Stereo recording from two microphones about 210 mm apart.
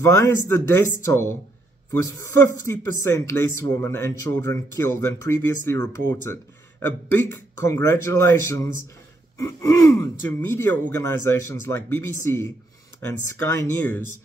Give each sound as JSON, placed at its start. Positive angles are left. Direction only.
{"t": 0.0, "sound": "speech", "side_deg": 15}